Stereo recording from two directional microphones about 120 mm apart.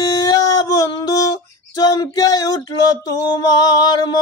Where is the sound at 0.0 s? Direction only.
30° left (ahead or behind).